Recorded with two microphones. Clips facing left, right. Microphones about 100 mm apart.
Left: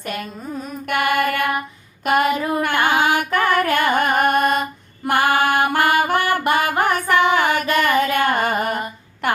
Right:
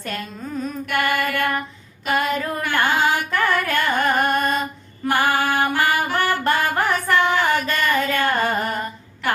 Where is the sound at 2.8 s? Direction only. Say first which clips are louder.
Even; 55° left (ahead or behind).